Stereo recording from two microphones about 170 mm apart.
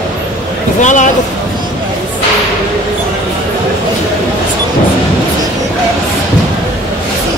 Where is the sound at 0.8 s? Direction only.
45° left (ahead or behind).